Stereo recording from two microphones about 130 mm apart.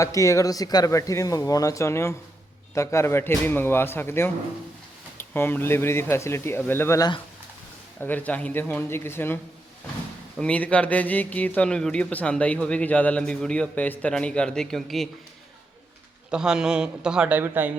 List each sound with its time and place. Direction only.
0.0 s speech: 25° left (ahead or behind)
8.0 s speech: 15° left (ahead or behind)
16.3 s a man's voice: 5° right (ahead or behind)